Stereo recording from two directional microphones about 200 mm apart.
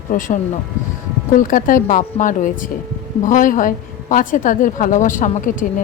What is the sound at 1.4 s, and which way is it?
A woman's voice, 40° left (ahead or behind).